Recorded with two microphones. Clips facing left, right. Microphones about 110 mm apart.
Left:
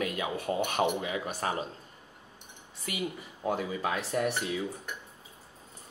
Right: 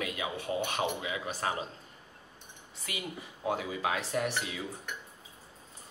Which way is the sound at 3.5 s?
45° left (ahead or behind).